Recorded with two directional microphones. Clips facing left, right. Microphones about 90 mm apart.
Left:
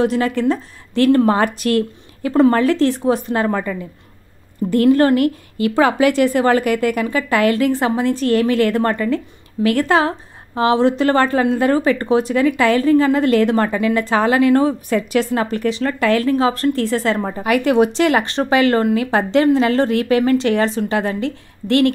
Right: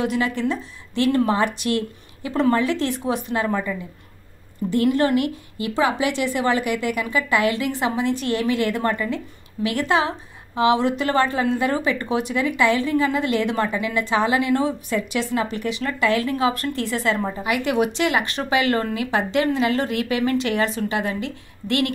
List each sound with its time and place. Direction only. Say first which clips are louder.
0.0 s speech: left 5 dB; 35° left (ahead or behind)
0.4 s a woman's voice: left 6 dB; 45° left (ahead or behind)